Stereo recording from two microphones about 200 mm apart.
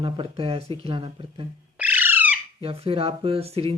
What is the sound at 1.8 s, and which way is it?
Squawk, 10° right (ahead or behind).